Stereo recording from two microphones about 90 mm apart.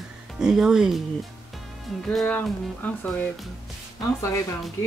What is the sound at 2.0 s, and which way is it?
Speech, 10° left (ahead or behind).